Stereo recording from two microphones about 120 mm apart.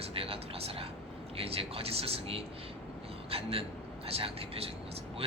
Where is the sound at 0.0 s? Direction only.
55° right (ahead or behind).